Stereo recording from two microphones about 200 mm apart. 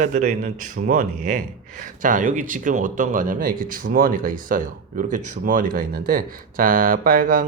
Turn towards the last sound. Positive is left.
turn(degrees=-45)  # may be behind; listen again after turning